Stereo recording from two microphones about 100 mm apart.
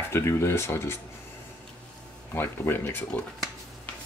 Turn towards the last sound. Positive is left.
turn(degrees=20)  # may be behind; listen again after turning